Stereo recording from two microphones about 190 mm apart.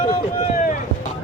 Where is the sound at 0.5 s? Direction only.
45° left (ahead or behind).